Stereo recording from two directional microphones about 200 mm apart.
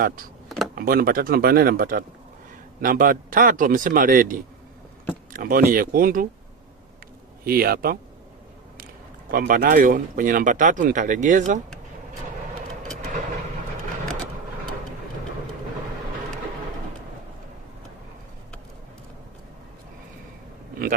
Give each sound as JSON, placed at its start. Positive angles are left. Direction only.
{"t": 0.4, "sound": "a sound", "side_deg": 0}
{"t": 0.8, "sound": "a man's voice", "side_deg": -45}
{"t": 7.4, "sound": "a man's voice", "side_deg": -50}
{"t": 9.3, "sound": "speech", "side_deg": -45}